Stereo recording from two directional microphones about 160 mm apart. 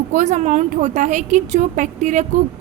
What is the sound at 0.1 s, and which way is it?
A woman's voice, 50° right (ahead or behind).